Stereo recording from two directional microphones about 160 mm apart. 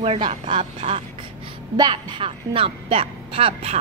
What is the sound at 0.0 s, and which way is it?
A woman's voice, 40° right (ahead or behind).